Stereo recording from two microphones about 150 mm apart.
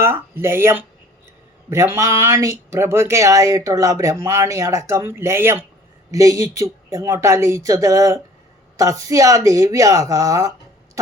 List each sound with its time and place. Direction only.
0.0 s speech: 15° right (ahead or behind)